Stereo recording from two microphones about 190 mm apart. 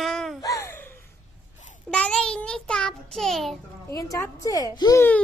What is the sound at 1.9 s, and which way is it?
Child singing, 5° left (ahead or behind).